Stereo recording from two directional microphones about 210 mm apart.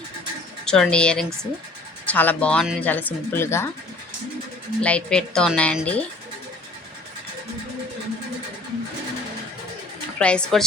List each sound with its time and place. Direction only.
0.6 s speech: 5° left (ahead or behind)
4.8 s speech: 5° left (ahead or behind)
10.2 s speech: 5° left (ahead or behind)